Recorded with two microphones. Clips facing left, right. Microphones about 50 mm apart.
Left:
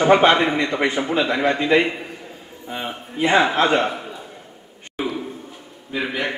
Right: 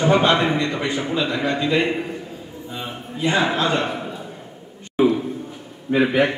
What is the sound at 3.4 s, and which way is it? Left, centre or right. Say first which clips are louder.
Speech: left 3 dB; left.